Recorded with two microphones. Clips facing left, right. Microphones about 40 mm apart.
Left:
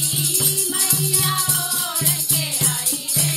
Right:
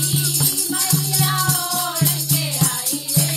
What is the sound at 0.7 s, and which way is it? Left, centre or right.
Music, centre.